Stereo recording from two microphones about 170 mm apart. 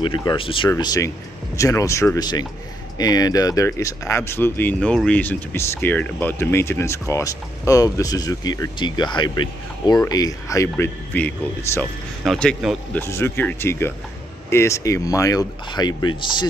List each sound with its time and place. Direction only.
0.0 s speech: 25° left (ahead or behind)